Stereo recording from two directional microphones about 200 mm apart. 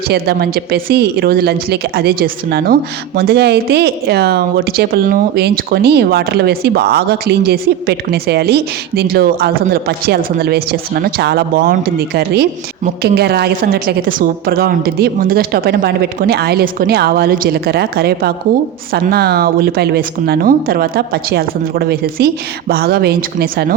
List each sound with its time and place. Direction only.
0.1 s speech: 50° right (ahead or behind)